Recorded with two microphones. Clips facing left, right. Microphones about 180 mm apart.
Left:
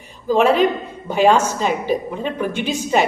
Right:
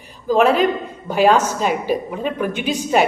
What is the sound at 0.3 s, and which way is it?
A woman's voice, centre (ahead or behind).